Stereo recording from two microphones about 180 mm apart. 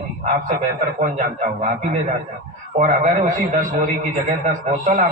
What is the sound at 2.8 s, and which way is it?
A man's voice, 45° right (ahead or behind).